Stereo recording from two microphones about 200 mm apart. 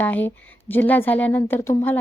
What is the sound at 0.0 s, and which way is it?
A woman's voice, 10° left (ahead or behind).